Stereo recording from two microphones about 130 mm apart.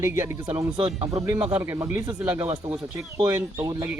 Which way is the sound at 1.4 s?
15° right (ahead or behind).